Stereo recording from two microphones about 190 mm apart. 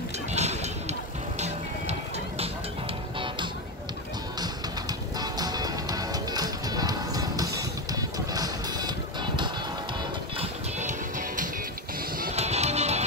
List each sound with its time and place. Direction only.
0.3 s music: 35° right (ahead or behind)
5.2 s music: 20° right (ahead or behind)
10.3 s music: 35° right (ahead or behind)